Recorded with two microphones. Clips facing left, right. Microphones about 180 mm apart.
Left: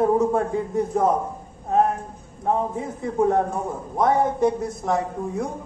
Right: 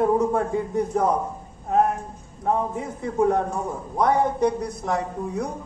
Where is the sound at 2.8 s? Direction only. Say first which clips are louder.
Even; 20° left (ahead or behind).